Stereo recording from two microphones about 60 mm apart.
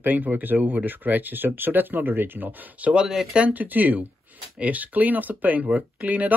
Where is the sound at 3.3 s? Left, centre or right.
Right.